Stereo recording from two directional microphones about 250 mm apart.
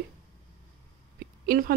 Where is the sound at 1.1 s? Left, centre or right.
Right.